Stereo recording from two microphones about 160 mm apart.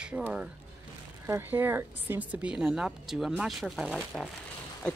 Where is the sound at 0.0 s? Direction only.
5° right (ahead or behind).